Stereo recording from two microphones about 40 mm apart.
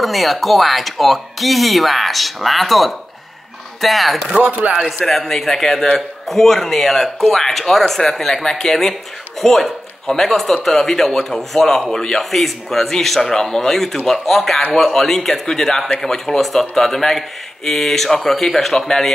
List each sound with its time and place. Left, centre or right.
0.0 s speech: centre
4.4 s speech: right
5.0 s speech: centre